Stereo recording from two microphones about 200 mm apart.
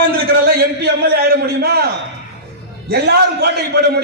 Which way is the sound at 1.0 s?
50° right (ahead or behind).